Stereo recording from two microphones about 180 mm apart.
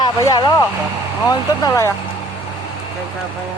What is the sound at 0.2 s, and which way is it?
Speech, 20° left (ahead or behind).